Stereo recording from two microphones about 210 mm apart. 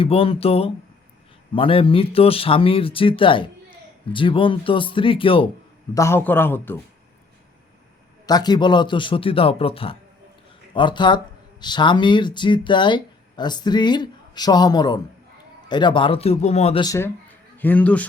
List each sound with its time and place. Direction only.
0.0 s speech: 25° left (ahead or behind)
5.9 s a man's voice: 15° left (ahead or behind)
8.3 s speech: 20° left (ahead or behind)
16.8 s a man's voice: 15° left (ahead or behind)